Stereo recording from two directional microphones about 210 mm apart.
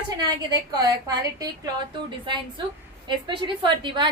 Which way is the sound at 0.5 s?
20° right (ahead or behind).